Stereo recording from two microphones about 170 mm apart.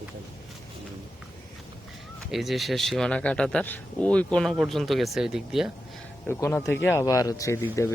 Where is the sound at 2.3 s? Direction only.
Centre (ahead or behind).